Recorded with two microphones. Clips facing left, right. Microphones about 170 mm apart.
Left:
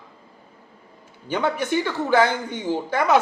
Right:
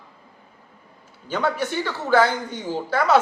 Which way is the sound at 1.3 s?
15° left (ahead or behind).